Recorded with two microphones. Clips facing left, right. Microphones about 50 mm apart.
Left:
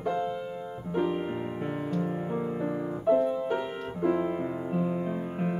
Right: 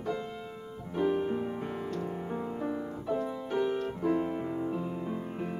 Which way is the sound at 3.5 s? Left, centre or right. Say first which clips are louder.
Right 1 dB; left.